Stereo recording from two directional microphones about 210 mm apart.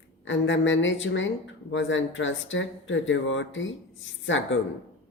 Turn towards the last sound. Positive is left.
turn(degrees=65)  # may be behind; listen again after turning